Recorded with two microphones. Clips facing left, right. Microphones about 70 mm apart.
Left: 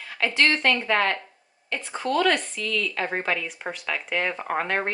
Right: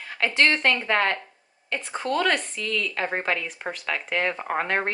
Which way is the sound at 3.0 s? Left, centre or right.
Centre.